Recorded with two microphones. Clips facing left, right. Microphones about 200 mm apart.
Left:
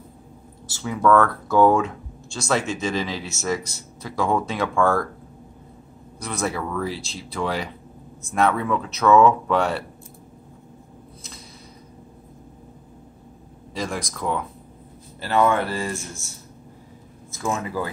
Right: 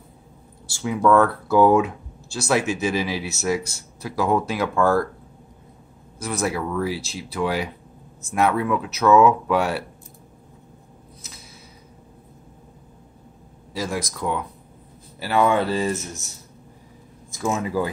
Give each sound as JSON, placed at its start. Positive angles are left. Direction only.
{"t": 0.7, "sound": "speech", "side_deg": -10}
{"t": 6.1, "sound": "speech", "side_deg": -5}
{"t": 13.7, "sound": "speech", "side_deg": 0}
{"t": 17.4, "sound": "speech", "side_deg": -15}